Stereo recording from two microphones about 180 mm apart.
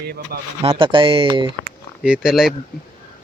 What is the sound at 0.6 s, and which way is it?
Speech, 30° right (ahead or behind).